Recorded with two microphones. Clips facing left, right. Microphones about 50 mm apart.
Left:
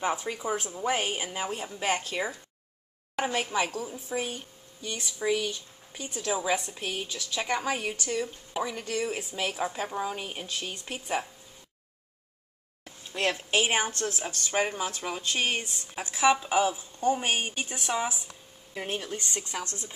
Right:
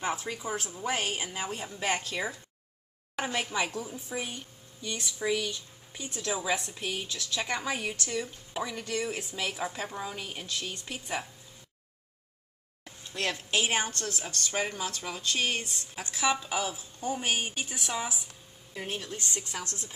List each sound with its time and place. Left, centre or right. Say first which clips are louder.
0.0 s a woman's voice: left 3 dB; centre
13.1 s a woman's voice: left 3 dB; centre